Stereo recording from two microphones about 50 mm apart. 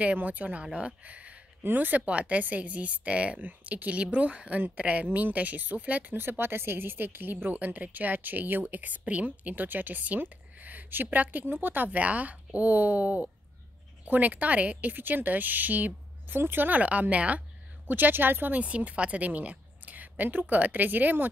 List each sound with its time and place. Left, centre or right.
0.0 s a woman's voice: right
1.6 s a woman's voice: right
6.1 s a woman's voice: right
18.8 s a woman's voice: right